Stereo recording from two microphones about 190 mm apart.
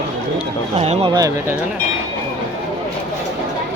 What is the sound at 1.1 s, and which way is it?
Speech, 20° right (ahead or behind).